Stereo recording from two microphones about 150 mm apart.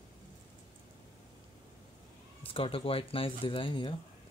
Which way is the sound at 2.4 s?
35° left (ahead or behind).